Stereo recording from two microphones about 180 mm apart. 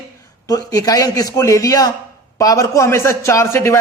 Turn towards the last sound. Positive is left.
turn(degrees=15)  # may be behind; listen again after turning